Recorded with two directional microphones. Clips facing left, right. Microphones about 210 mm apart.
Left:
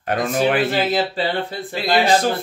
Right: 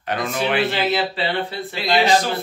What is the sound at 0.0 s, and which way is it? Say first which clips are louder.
A man's voice: left 4 dB; 50° left (ahead or behind).